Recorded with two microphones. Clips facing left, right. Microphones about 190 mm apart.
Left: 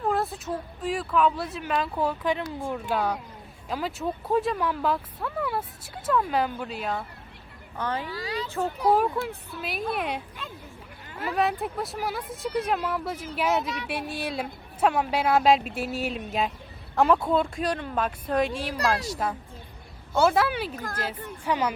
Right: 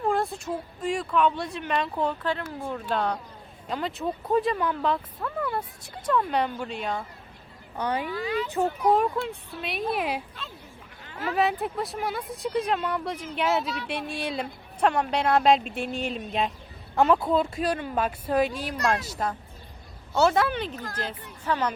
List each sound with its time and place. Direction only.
0.1 s a sound: centre (ahead or behind)
0.8 s speech: centre (ahead or behind)
7.8 s speech: 15° right (ahead or behind)
8.1 s speech: 35° left (ahead or behind)
8.4 s speech: 15° right (ahead or behind)
9.2 s speech: centre (ahead or behind)
11.2 s speech: centre (ahead or behind)
20.7 s speech: 45° left (ahead or behind)
21.4 s speech: 10° left (ahead or behind)